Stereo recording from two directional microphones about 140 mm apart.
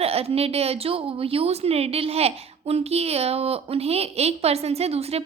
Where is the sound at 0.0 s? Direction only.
45° right (ahead or behind).